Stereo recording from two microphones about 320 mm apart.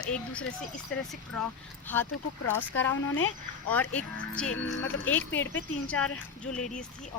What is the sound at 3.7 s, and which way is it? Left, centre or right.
Speech, centre.